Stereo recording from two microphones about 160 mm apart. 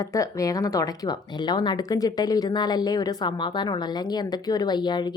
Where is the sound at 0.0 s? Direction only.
20° left (ahead or behind).